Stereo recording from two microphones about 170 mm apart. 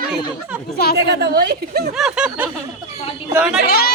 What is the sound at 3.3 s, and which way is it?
Speech, 5° right (ahead or behind).